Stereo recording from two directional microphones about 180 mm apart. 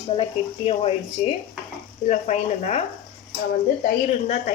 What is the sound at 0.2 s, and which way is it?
Speech, 30° left (ahead or behind).